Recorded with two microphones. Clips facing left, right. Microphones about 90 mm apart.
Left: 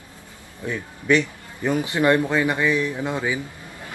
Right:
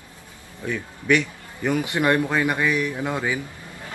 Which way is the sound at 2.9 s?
15° right (ahead or behind).